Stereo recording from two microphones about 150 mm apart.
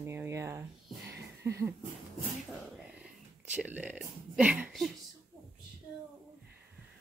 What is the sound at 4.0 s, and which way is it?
Speech, 5° right (ahead or behind).